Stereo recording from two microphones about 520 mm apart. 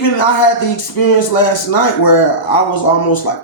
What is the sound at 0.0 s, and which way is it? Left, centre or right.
Speech, left.